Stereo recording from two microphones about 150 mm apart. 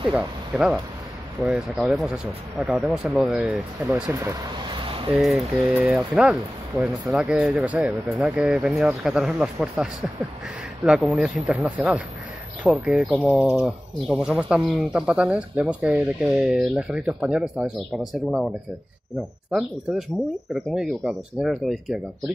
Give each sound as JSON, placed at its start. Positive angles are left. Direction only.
{"t": 0.1, "sound": "speech", "side_deg": -5}
{"t": 4.1, "sound": "speech", "side_deg": -20}
{"t": 4.8, "sound": "a sound", "side_deg": -35}
{"t": 5.1, "sound": "speech", "side_deg": -10}